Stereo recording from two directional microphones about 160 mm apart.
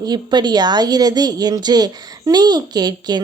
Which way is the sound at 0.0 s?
25° right (ahead or behind).